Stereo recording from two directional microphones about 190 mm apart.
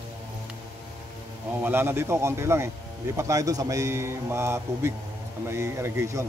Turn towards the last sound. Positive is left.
turn(degrees=-15)  # may be behind; listen again after turning